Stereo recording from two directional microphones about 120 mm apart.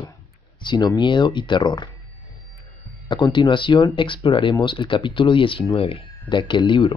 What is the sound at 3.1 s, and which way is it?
Speech, 40° left (ahead or behind).